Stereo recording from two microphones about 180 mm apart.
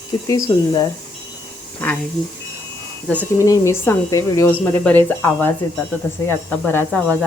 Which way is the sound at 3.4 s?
15° left (ahead or behind).